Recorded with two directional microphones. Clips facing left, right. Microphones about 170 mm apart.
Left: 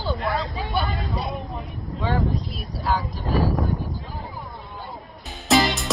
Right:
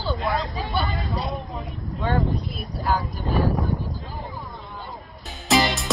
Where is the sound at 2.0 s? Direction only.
Centre (ahead or behind).